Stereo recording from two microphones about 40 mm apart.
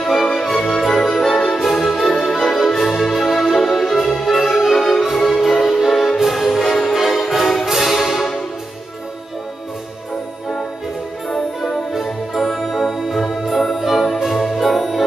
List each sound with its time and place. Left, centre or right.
0.0 s music: centre
11.2 s music: centre
11.9 s music: centre